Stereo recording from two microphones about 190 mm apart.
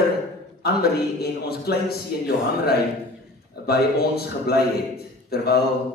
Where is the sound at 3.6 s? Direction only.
55° left (ahead or behind).